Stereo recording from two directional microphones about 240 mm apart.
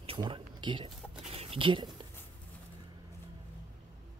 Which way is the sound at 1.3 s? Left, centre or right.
Right.